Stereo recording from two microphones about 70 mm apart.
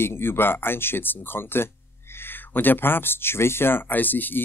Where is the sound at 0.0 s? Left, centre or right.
Left.